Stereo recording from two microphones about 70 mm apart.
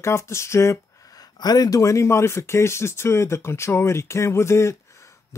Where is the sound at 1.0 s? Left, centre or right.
Left.